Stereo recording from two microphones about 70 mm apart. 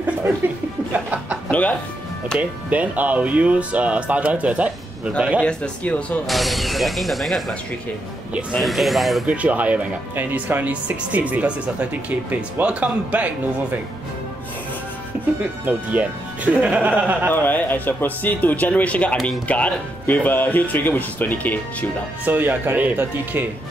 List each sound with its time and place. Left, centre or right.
0.9 s speech: centre
1.5 s speech: left
2.3 s speech: right
5.4 s speech: centre
6.2 s speech: centre
9.2 s speech: centre
15.1 s music: right
15.6 s speech: right
17.3 s speech: left
22.2 s speech: right